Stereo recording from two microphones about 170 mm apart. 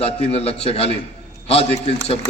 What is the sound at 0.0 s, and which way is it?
A man's voice, 35° left (ahead or behind).